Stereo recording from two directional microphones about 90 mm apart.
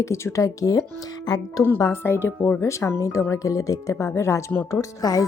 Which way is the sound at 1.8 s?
25° left (ahead or behind).